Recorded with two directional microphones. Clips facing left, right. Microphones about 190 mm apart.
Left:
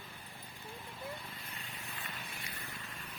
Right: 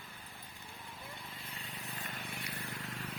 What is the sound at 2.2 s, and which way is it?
Vehicle, 65° right (ahead or behind).